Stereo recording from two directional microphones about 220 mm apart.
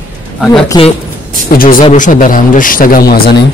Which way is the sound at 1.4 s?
40° left (ahead or behind).